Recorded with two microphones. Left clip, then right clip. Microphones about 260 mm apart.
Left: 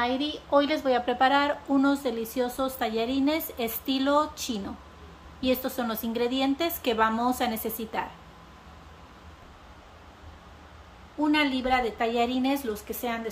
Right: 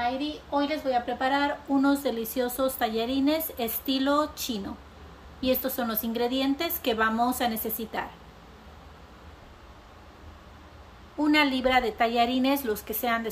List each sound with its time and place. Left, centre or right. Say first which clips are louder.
0.0 s a woman's voice: left 1 dB; centre
11.2 s a woman's voice: right 2 dB; centre